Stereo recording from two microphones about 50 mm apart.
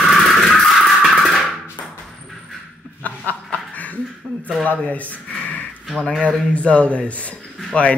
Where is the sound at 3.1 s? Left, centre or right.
Left.